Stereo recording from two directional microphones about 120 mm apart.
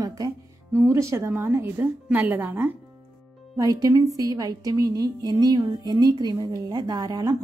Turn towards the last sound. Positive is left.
turn(degrees=-30)  # may be behind; listen again after turning